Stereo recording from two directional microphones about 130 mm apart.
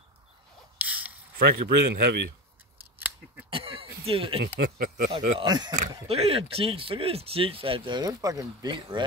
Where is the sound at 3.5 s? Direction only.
45° right (ahead or behind).